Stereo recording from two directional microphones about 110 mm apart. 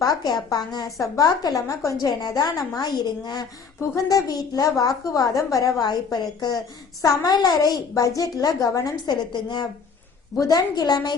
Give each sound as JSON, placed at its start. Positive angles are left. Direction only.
{"t": 0.0, "sound": "a woman's voice", "side_deg": 40}